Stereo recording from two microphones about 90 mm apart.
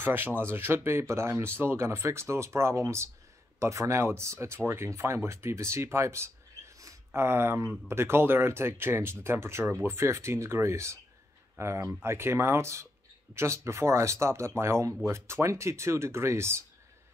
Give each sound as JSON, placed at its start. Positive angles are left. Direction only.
{"t": 0.0, "sound": "speech", "side_deg": -25}